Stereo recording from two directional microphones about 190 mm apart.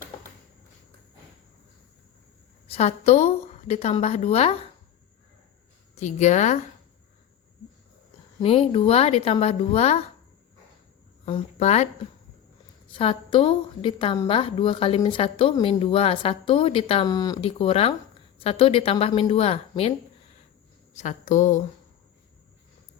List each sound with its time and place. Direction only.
2.6 s a woman's voice: 30° left (ahead or behind)
6.0 s a woman's voice: 40° left (ahead or behind)
8.4 s a woman's voice: 30° left (ahead or behind)
11.3 s a woman's voice: 30° left (ahead or behind)
13.0 s a woman's voice: 30° left (ahead or behind)
17.5 s a woman's voice: 30° left (ahead or behind)
20.9 s a woman's voice: 40° left (ahead or behind)